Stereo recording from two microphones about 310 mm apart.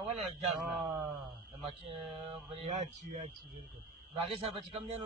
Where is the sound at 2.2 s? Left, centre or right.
Centre.